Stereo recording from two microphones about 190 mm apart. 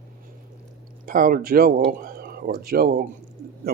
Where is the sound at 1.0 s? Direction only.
50° right (ahead or behind).